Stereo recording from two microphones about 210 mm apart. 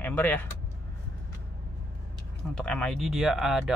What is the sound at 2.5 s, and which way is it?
A man's voice, 5° left (ahead or behind).